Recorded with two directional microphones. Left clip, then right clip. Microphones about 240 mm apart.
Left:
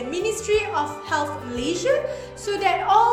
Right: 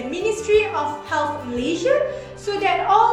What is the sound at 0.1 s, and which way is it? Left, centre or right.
A woman's voice, left.